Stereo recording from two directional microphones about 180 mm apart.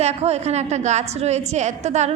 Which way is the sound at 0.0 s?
35° right (ahead or behind).